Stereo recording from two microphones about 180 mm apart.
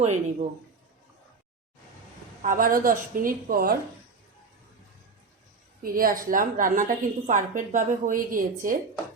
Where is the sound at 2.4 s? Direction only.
50° right (ahead or behind).